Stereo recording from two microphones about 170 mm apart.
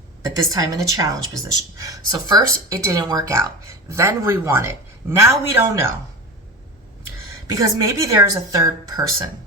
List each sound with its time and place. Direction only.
0.2 s a woman's voice: 20° right (ahead or behind)
7.4 s a woman's voice: 20° right (ahead or behind)